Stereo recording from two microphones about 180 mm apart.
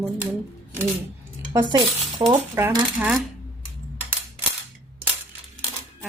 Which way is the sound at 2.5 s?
15° right (ahead or behind).